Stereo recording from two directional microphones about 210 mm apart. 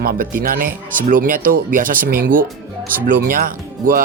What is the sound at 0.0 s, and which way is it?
Speech, 45° right (ahead or behind).